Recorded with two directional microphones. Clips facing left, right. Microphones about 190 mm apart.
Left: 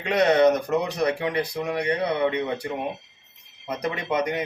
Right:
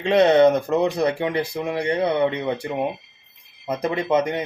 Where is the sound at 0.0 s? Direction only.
25° right (ahead or behind).